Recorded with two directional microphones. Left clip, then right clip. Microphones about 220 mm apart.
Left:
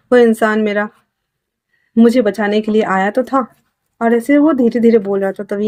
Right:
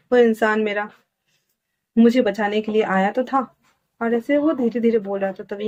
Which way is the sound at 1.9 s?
55° left (ahead or behind).